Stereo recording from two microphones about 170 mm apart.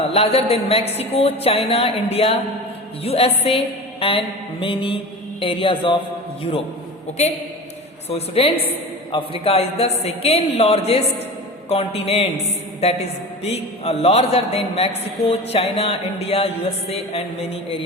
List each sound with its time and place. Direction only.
0.1 s music: 35° left (ahead or behind)
8.1 s music: 35° left (ahead or behind)